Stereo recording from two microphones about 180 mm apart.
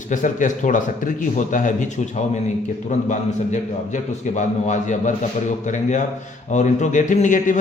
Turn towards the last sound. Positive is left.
turn(degrees=45)  # may be behind; listen again after turning